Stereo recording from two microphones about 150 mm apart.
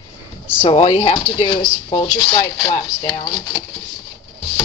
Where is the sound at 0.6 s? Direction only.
40° left (ahead or behind).